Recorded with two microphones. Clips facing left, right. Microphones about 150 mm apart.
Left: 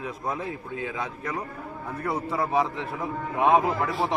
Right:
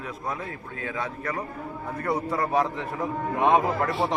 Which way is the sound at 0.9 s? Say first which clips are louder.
Right 5 dB; 15° left (ahead or behind).